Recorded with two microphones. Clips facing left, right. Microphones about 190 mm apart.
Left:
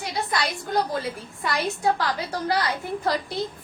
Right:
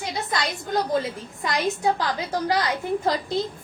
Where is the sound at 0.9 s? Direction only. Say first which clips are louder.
Right 4 dB; 20° right (ahead or behind).